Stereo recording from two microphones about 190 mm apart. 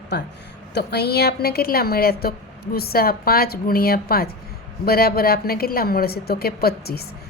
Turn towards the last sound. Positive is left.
turn(degrees=55)  # may be behind; listen again after turning